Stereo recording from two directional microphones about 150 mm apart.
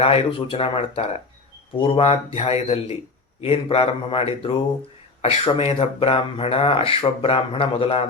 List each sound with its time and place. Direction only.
0.0 s speech: 40° left (ahead or behind)